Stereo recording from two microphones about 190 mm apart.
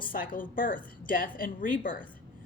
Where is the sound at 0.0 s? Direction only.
45° left (ahead or behind).